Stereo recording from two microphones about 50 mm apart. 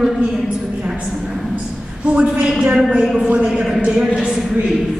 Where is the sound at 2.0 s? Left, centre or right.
Right.